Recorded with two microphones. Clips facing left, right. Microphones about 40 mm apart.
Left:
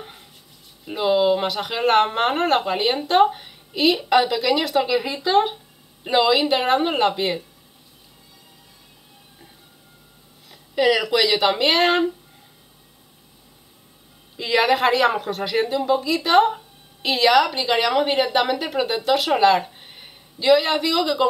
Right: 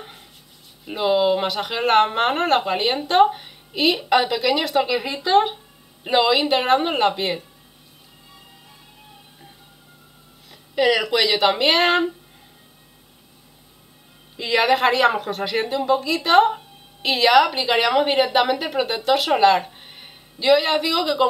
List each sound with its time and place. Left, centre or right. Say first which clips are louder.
0.0 s a sound: even; centre
0.8 s speech: even; centre
10.5 s speech: even; centre
14.3 s speech: even; centre